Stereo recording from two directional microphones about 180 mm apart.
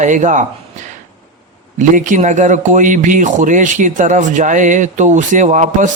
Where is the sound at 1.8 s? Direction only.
45° right (ahead or behind).